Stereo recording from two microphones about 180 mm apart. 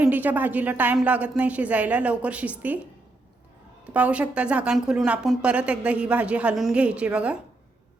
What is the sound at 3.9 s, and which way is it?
Speech, 10° right (ahead or behind).